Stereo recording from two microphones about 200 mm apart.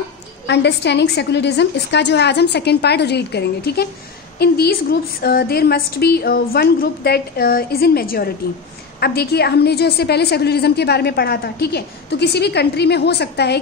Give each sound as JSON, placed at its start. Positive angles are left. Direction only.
{"t": 0.5, "sound": "a woman's voice", "side_deg": 60}